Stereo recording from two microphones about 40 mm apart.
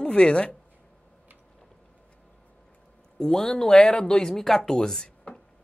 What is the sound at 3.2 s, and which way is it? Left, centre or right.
Speech, centre.